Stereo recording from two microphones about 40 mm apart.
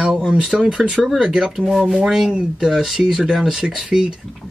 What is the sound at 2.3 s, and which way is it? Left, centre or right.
Speech, centre.